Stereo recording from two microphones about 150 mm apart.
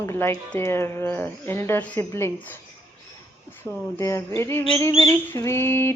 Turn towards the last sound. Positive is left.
turn(degrees=15)  # may be behind; listen again after turning